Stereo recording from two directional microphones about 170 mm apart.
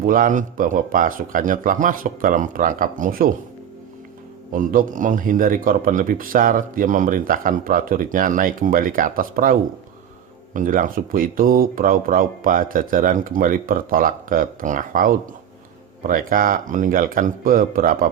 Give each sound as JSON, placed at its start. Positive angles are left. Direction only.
{"t": 0.0, "sound": "speech", "side_deg": -55}
{"t": 4.5, "sound": "speech", "side_deg": -55}